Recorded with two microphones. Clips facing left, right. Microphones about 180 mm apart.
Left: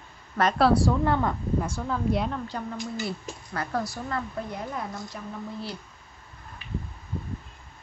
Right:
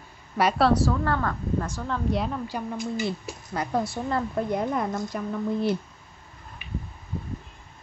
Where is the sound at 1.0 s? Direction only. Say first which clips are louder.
Left 2 dB; 20° left (ahead or behind).